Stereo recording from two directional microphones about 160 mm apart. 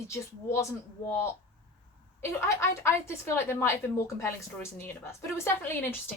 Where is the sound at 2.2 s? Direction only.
15° left (ahead or behind).